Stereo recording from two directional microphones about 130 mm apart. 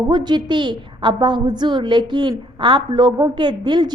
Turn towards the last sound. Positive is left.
turn(degrees=-35)  # may be behind; listen again after turning